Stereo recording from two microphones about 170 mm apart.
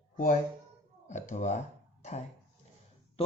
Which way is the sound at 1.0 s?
45° left (ahead or behind).